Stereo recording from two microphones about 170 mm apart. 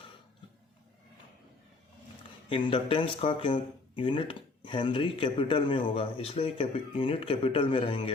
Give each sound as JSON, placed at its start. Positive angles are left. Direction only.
{"t": 2.5, "sound": "speech", "side_deg": 30}